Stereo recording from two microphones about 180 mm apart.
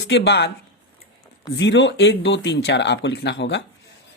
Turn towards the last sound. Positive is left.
turn(degrees=75)  # may be behind; listen again after turning